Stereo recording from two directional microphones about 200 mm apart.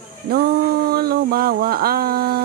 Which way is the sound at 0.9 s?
50° right (ahead or behind).